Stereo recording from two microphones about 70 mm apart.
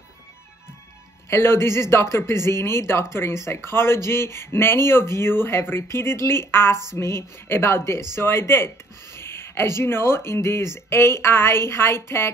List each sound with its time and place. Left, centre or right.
1.3 s speech: left